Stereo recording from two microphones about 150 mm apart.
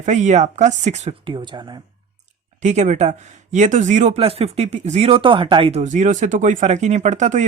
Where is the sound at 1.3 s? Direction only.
30° right (ahead or behind).